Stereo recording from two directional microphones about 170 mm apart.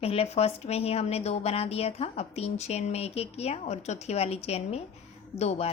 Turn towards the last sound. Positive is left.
turn(degrees=35)  # may be behind; listen again after turning